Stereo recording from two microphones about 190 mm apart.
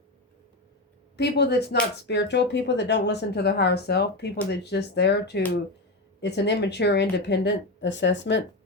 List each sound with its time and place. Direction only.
1.1 s speech: 60° left (ahead or behind)